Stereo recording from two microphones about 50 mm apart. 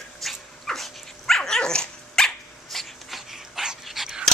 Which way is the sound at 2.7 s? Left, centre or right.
Centre.